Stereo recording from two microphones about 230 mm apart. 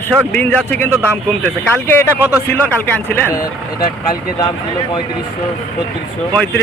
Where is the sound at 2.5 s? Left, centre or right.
Centre.